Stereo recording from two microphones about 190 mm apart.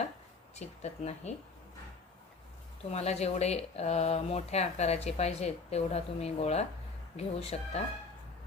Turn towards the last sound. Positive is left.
turn(degrees=35)  # may be behind; listen again after turning